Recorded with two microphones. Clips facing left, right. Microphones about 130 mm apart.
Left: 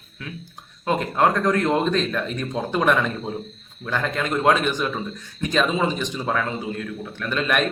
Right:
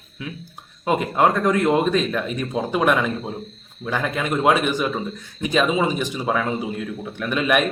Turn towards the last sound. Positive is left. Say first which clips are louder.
# right 3 dB
turn(degrees=-10)  # may be behind; listen again after turning